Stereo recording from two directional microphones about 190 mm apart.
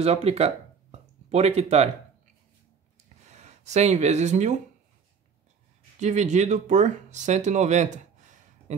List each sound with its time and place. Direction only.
0.0 s speech: 35° right (ahead or behind)
3.3 s speech: 35° right (ahead or behind)
5.9 s speech: 40° right (ahead or behind)